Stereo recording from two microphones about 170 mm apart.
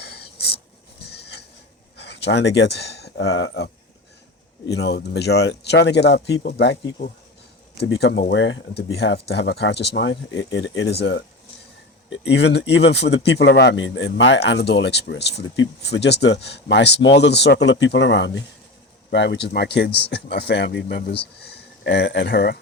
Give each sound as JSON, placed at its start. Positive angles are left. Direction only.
{"t": 0.0, "sound": "a sound", "side_deg": 70}
{"t": 2.0, "sound": "speech", "side_deg": 80}
{"t": 4.7, "sound": "speech", "side_deg": 80}
{"t": 6.6, "sound": "speech", "side_deg": 90}
{"t": 7.8, "sound": "speech", "side_deg": 75}
{"t": 12.2, "sound": "speech", "side_deg": 85}